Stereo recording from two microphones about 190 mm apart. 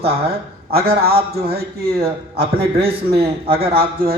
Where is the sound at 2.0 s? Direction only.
30° right (ahead or behind).